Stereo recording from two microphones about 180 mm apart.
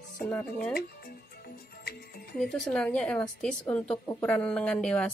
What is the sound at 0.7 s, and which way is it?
Music, 60° left (ahead or behind).